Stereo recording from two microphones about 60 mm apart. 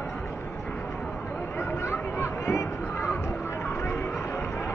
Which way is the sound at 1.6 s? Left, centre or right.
Left.